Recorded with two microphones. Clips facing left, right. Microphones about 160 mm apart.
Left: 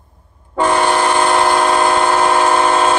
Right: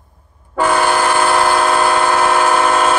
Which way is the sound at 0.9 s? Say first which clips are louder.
Even; 20° left (ahead or behind).